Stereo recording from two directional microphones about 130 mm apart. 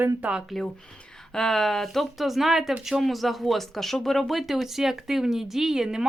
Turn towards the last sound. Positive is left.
turn(degrees=-5)  # may be behind; listen again after turning